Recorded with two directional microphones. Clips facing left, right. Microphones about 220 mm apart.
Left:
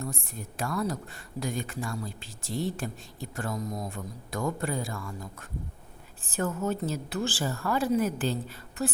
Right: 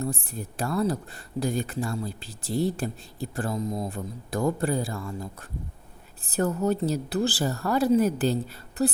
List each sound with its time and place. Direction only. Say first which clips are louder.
0.0 s speech: right 6 dB; 35° right (ahead or behind)